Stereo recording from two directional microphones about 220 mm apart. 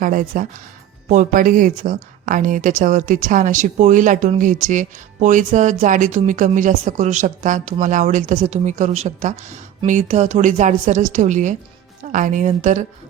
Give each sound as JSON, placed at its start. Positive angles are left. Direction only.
{"t": 0.0, "sound": "a woman's voice", "side_deg": -35}